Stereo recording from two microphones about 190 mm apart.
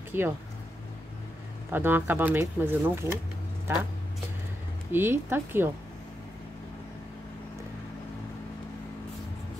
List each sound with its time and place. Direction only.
0.1 s speech: 10° right (ahead or behind)
1.7 s speech: 10° right (ahead or behind)
4.9 s speech: 10° right (ahead or behind)